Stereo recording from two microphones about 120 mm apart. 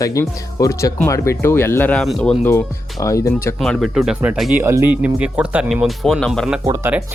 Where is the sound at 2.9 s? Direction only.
25° left (ahead or behind).